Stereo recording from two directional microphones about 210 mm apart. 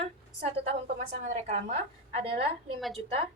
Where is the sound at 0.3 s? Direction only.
30° right (ahead or behind).